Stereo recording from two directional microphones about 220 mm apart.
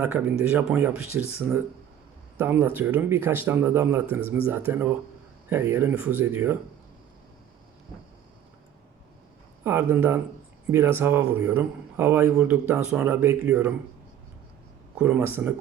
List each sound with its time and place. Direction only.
0.0 s speech: 5° right (ahead or behind)
2.4 s speech: 10° right (ahead or behind)
9.6 s speech: 10° right (ahead or behind)
14.9 s speech: 5° right (ahead or behind)